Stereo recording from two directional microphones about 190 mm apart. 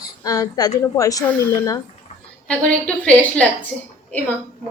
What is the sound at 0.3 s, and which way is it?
Speech, 20° left (ahead or behind).